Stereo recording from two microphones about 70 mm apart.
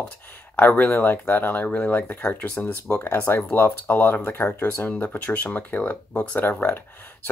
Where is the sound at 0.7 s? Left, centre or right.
Left.